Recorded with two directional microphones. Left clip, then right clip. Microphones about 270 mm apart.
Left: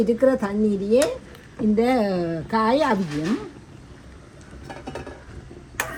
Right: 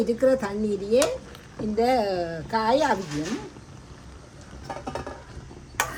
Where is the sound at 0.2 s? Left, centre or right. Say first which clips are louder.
Left 2 dB; centre.